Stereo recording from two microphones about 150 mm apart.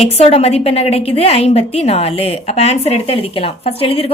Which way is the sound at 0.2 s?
40° left (ahead or behind).